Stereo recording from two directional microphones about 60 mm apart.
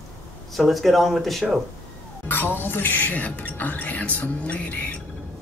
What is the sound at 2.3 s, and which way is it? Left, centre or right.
Speech, left.